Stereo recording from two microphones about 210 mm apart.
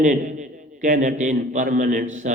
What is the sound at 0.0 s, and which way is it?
A man's voice, 35° right (ahead or behind).